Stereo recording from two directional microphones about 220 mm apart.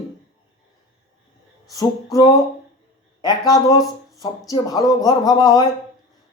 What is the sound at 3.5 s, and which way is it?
Speech, 15° left (ahead or behind).